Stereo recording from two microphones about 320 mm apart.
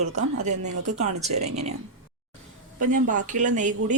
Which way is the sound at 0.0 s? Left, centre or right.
Right.